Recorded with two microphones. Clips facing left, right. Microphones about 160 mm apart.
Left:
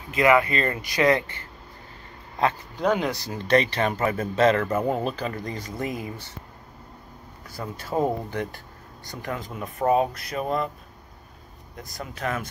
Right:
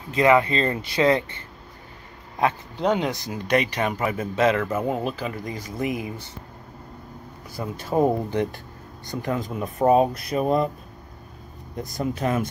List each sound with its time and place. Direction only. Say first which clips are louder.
0.1 s speech: right 2 dB; 30° right (ahead or behind)
7.5 s speech: right 4 dB; 15° right (ahead or behind)
11.7 s speech: right 10 dB; 25° right (ahead or behind)